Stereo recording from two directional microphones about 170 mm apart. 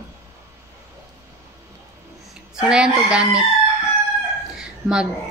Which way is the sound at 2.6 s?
5° right (ahead or behind).